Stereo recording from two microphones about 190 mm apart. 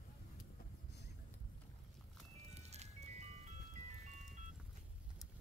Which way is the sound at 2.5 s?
35° right (ahead or behind).